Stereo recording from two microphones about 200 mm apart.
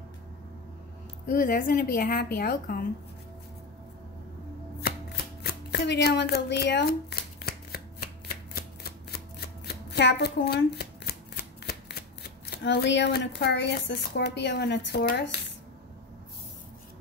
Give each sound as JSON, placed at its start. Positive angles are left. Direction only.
{"t": 1.3, "sound": "a woman's voice", "side_deg": 45}
{"t": 4.8, "sound": "chopping", "side_deg": 50}
{"t": 8.5, "sound": "shuffling cards", "side_deg": 50}
{"t": 9.7, "sound": "speech", "side_deg": 55}